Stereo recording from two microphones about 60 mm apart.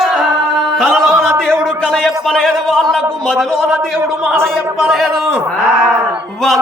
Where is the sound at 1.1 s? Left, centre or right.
Right.